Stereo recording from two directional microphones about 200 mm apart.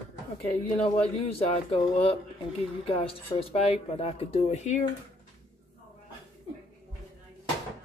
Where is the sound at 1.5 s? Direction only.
30° left (ahead or behind).